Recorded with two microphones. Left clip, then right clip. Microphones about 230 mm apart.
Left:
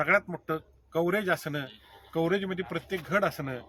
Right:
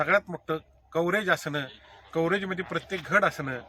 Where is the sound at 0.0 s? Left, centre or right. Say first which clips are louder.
Right 1 dB; centre.